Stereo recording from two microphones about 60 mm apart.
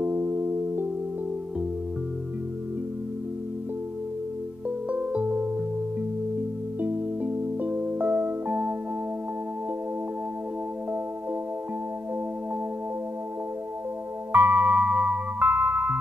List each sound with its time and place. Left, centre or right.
0.0 s music: right
4.6 s music: right
6.8 s music: right
14.3 s music: right
15.3 s music: right